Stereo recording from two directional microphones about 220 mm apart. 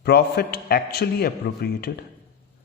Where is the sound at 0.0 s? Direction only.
45° left (ahead or behind).